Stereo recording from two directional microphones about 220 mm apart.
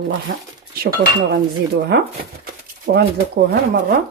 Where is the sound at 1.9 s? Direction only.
45° right (ahead or behind).